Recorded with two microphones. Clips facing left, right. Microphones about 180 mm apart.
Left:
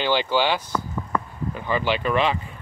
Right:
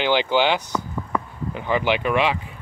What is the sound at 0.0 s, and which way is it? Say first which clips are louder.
Speech: right 2 dB; 15° right (ahead or behind).